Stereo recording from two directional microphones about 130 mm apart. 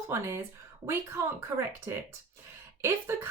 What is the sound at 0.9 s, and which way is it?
Speech, 20° right (ahead or behind).